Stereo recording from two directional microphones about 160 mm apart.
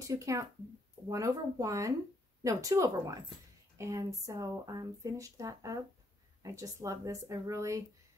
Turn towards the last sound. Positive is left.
turn(degrees=-20)  # may be behind; listen again after turning